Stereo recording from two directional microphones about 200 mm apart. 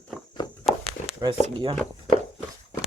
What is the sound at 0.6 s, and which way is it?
Walk, 30° left (ahead or behind).